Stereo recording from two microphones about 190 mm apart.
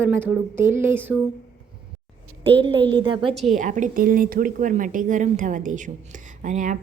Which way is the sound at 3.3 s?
Centre (ahead or behind).